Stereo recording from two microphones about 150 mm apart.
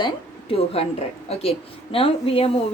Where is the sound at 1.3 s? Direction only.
40° left (ahead or behind).